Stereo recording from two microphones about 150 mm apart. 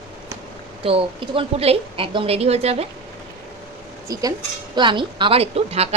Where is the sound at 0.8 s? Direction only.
40° right (ahead or behind).